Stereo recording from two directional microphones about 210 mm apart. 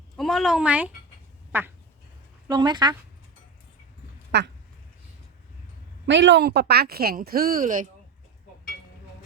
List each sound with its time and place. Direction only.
0.2 s speech: centre (ahead or behind)
1.5 s duck: 10° right (ahead or behind)
2.5 s speech: 20° right (ahead or behind)
4.3 s speech: 55° right (ahead or behind)
6.1 s speech: 60° right (ahead or behind); by 7.9 s 40° right (ahead or behind)